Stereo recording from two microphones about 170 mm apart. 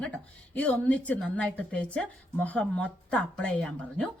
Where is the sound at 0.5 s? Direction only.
5° left (ahead or behind).